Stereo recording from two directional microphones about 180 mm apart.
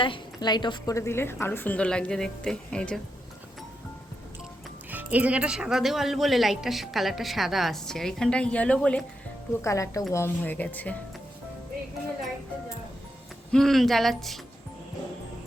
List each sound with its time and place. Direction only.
0.0 s a woman's voice: 25° left (ahead or behind); by 3.0 s 5° left (ahead or behind)
4.9 s a woman's voice: 10° right (ahead or behind); by 10.9 s 10° left (ahead or behind)
13.5 s speech: centre (ahead or behind)